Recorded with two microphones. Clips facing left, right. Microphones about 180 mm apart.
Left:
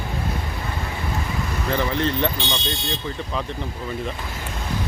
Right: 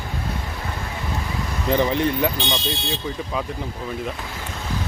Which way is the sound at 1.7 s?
15° right (ahead or behind).